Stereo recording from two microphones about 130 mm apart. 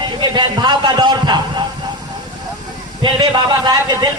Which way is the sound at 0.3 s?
35° right (ahead or behind).